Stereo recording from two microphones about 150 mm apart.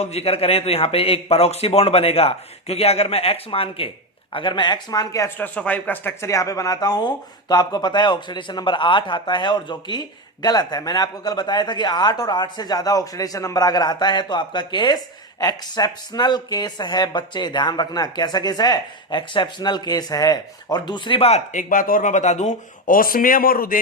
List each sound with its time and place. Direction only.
0.0 s a man's voice: 45° left (ahead or behind); by 5.5 s 20° left (ahead or behind)
5.5 s speech: 10° left (ahead or behind); by 23.8 s 75° left (ahead or behind)